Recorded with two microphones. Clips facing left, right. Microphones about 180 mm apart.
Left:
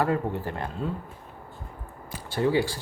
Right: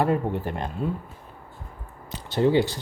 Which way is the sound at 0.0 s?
20° right (ahead or behind).